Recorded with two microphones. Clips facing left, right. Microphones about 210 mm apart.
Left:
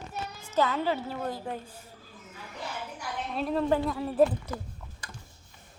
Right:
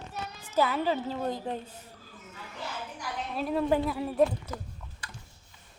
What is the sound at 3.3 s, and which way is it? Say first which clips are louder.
Speech: even; 5° right (ahead or behind).